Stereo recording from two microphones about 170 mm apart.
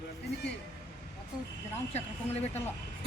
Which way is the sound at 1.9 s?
40° left (ahead or behind).